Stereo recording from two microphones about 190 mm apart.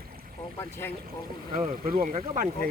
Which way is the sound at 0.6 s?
15° left (ahead or behind).